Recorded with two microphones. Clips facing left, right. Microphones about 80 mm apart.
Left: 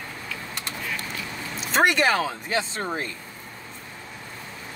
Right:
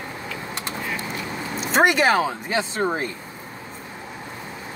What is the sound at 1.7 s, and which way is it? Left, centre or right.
Speech, centre.